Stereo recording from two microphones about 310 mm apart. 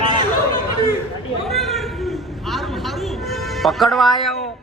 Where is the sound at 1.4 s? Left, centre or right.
Centre.